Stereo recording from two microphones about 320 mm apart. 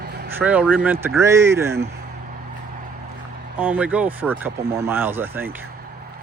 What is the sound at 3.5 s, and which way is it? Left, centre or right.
Speech, centre.